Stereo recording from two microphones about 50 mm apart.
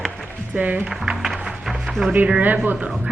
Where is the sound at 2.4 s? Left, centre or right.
Right.